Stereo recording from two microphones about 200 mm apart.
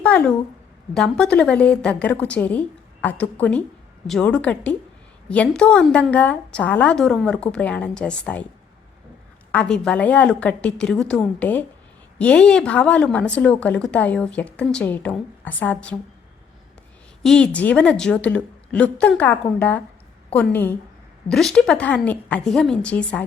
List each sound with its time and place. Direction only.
0.0 s a woman's voice: 5° left (ahead or behind)
9.5 s speech: 5° left (ahead or behind)
17.2 s a woman's voice: 5° left (ahead or behind)